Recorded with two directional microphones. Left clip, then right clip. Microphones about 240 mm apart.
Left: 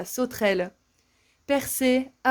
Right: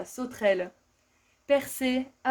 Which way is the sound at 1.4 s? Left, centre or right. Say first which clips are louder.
Left 2 dB; left.